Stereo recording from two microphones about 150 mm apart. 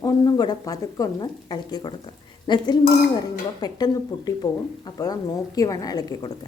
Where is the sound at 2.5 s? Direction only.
30° left (ahead or behind).